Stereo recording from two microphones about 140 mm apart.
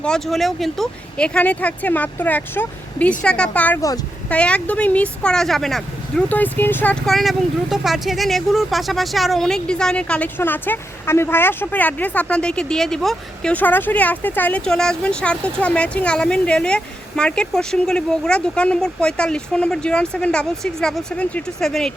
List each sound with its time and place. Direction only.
0.0 s speech: 5° left (ahead or behind)
3.8 s speech: 25° left (ahead or behind)
4.3 s speech: 10° left (ahead or behind)